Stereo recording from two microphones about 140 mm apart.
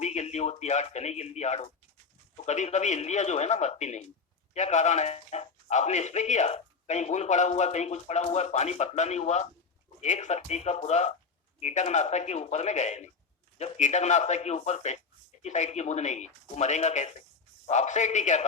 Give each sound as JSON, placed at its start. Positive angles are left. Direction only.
{"t": 0.0, "sound": "a man's voice", "side_deg": 55}